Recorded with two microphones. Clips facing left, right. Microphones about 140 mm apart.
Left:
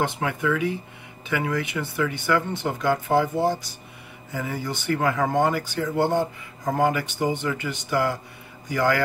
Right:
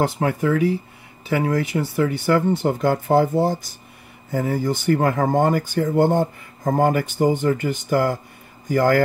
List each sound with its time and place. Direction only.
0.0 s speech: 40° right (ahead or behind)